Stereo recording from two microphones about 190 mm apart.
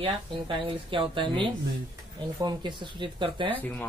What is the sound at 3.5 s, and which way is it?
Speech, 10° left (ahead or behind).